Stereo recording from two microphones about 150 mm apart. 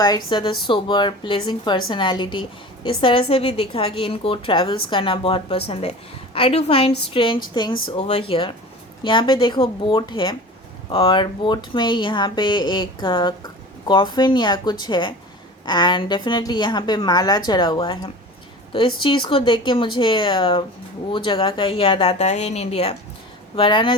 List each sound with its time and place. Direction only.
0.3 s a woman's voice: 30° left (ahead or behind)